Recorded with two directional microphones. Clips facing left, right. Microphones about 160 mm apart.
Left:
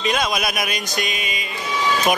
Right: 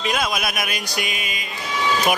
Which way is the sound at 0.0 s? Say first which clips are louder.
Left 2 dB; 5° right (ahead or behind).